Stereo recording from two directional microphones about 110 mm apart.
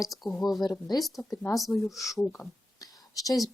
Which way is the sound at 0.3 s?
Centre (ahead or behind).